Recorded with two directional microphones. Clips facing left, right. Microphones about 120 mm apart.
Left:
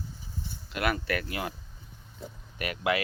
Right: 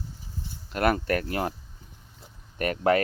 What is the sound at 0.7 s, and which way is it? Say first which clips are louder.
Speech: right 5 dB; 40° right (ahead or behind).